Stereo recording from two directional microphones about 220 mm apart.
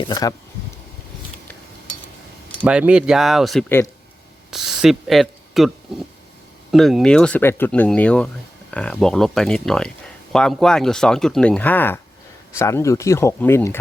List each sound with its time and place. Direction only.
0.0 s speech: 15° left (ahead or behind)
2.6 s speech: 5° right (ahead or behind); by 13.7 s 10° left (ahead or behind)